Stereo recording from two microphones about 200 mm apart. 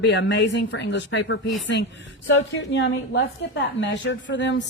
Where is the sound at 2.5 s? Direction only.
65° left (ahead or behind).